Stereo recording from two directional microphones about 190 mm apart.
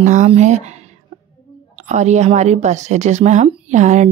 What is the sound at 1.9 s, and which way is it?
Speech, 40° right (ahead or behind).